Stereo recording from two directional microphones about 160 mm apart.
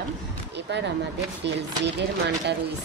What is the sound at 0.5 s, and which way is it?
Speech, 90° right.